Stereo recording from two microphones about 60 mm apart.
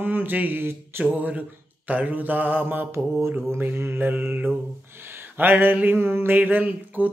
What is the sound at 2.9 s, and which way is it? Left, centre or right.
Mantra, right.